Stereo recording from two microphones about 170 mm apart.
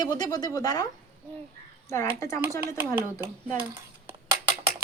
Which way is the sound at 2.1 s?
15° left (ahead or behind).